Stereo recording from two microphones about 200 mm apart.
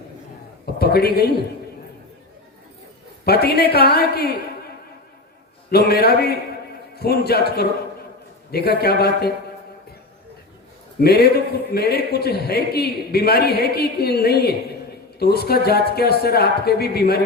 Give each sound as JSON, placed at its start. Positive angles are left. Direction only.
{"t": 0.6, "sound": "a man's voice", "side_deg": 50}
{"t": 3.2, "sound": "a man's voice", "side_deg": 50}
{"t": 5.7, "sound": "a man's voice", "side_deg": 50}
{"t": 8.5, "sound": "a man's voice", "side_deg": 50}
{"t": 11.0, "sound": "a man's voice", "side_deg": 50}